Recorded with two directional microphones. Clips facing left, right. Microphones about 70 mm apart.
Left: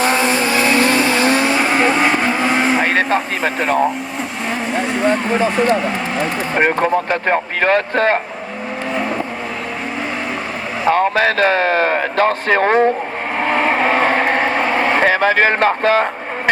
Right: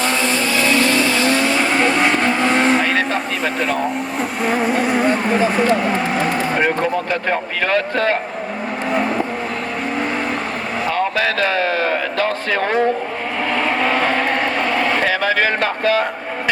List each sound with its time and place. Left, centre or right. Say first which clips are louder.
0.0 s vehicle: left 3 dB; left; by 2.8 s centre
2.8 s speech: left 3 dB; left
4.4 s vehicle: right 3 dB; centre
6.6 s speech: left 8 dB; left
10.8 s speech: left 6 dB; left
13.4 s vehicle: left 3 dB; left